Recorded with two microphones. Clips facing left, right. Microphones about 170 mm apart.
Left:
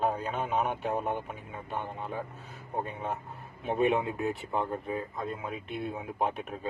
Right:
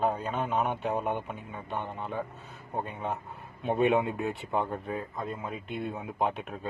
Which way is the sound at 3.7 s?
Centre (ahead or behind).